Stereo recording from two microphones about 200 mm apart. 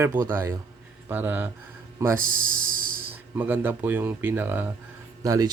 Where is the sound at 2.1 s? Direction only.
45° right (ahead or behind).